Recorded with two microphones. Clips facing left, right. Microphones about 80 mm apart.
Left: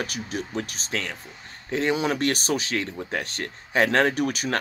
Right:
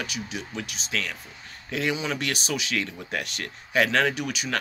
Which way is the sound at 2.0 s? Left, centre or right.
Left.